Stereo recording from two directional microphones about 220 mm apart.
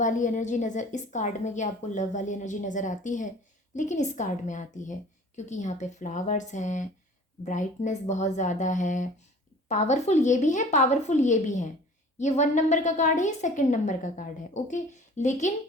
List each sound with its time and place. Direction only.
0.0 s a woman's voice: 35° left (ahead or behind)